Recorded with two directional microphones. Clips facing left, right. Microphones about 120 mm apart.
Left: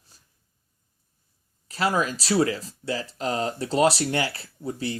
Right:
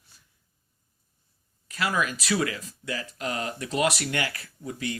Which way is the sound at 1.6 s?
35° left (ahead or behind).